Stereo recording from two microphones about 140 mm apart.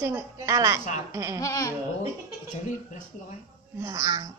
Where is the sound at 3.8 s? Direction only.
25° right (ahead or behind).